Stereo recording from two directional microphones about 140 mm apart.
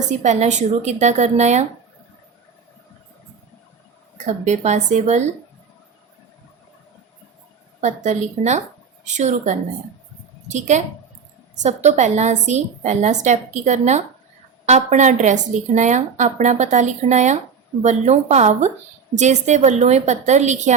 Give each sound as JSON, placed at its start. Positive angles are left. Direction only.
{"t": 0.1, "sound": "a woman's voice", "side_deg": -55}
{"t": 4.2, "sound": "a woman's voice", "side_deg": -55}
{"t": 7.8, "sound": "a woman's voice", "side_deg": -55}